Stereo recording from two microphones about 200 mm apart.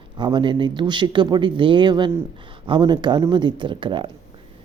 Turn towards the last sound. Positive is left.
turn(degrees=-25)  # may be behind; listen again after turning